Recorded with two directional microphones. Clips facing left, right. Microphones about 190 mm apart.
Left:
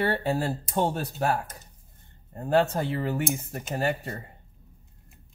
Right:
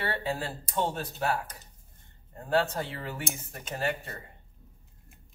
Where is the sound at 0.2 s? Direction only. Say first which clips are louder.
Left 6 dB; 40° left (ahead or behind).